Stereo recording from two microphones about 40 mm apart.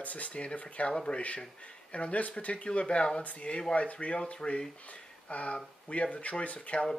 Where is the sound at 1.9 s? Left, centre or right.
Left.